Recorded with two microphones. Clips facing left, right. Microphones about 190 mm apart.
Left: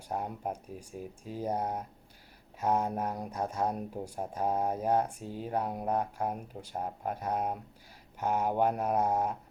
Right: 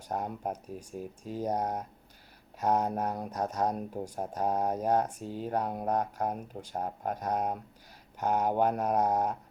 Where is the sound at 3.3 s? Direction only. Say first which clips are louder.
Right 2 dB; 10° left (ahead or behind).